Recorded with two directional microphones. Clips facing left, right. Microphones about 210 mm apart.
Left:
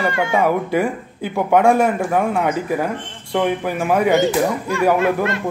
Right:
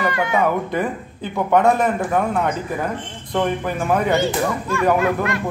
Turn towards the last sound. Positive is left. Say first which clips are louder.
# left 2 dB
turn(degrees=25)  # may be behind; listen again after turning